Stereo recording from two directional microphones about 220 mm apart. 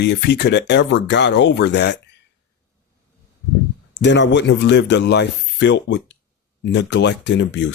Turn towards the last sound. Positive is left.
turn(degrees=55)  # may be behind; listen again after turning